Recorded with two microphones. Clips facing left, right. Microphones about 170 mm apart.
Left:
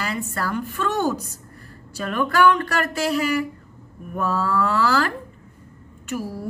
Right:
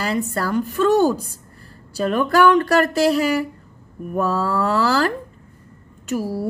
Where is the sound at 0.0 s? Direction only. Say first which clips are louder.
Right 5 dB; 35° right (ahead or behind).